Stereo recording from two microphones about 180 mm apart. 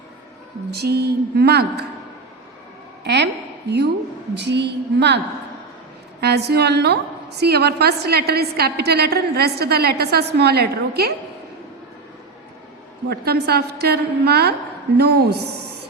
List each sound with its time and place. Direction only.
0.7 s a woman's voice: 65° right (ahead or behind)
3.0 s a sound: 70° right (ahead or behind)
3.7 s a woman's voice: 70° right (ahead or behind)
13.1 s a woman's voice: 60° right (ahead or behind)